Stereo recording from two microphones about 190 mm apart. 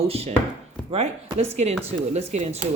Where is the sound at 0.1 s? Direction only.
30° right (ahead or behind).